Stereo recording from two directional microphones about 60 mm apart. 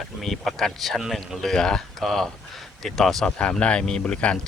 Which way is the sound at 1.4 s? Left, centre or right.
Centre.